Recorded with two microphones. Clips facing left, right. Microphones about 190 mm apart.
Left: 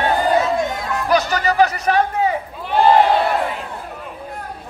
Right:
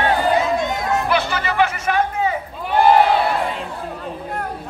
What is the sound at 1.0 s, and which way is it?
Music, 40° left (ahead or behind).